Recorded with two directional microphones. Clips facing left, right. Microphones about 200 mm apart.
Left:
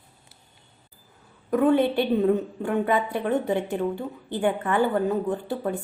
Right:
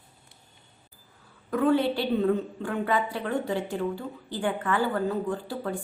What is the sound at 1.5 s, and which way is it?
A woman's voice, 20° left (ahead or behind).